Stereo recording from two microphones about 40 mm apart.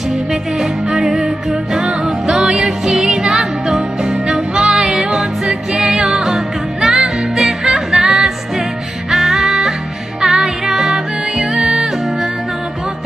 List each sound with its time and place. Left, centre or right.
0.3 s music: centre